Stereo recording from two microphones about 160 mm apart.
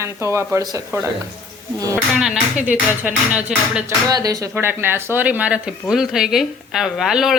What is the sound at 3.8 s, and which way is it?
Speech, 25° right (ahead or behind).